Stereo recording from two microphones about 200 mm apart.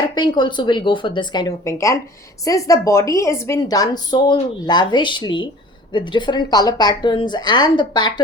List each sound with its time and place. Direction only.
0.1 s a woman's voice: 20° left (ahead or behind)